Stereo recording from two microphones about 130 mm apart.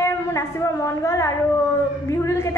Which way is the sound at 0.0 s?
20° left (ahead or behind).